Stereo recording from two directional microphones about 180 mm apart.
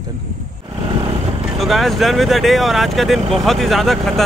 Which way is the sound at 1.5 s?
Centre (ahead or behind).